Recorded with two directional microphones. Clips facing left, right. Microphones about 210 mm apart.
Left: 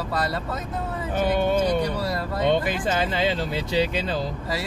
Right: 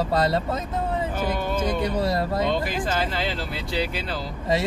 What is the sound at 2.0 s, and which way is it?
Speech, 25° right (ahead or behind).